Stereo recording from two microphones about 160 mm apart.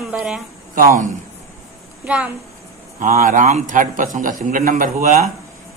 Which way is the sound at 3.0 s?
55° right (ahead or behind).